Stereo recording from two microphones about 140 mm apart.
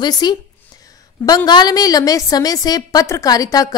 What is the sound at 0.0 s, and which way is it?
A woman's voice, 30° left (ahead or behind).